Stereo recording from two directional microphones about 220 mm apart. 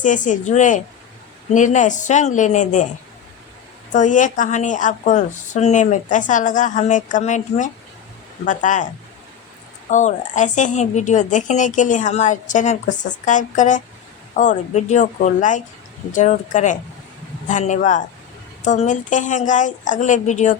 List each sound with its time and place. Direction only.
0.0 s a woman's voice: 35° left (ahead or behind)
3.9 s a woman's voice: 35° left (ahead or behind)
9.9 s a woman's voice: 35° left (ahead or behind)